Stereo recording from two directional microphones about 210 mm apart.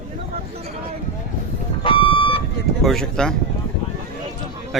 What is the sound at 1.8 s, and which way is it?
Car alarm, 25° left (ahead or behind).